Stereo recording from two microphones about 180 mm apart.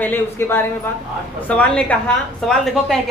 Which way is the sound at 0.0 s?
10° left (ahead or behind).